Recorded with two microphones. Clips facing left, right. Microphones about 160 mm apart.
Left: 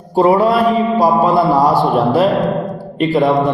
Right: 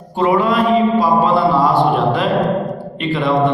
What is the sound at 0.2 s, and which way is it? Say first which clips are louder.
Speech: left 3 dB; 35° left (ahead or behind).